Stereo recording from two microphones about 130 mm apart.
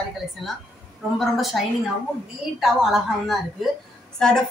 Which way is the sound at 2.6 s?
5° right (ahead or behind).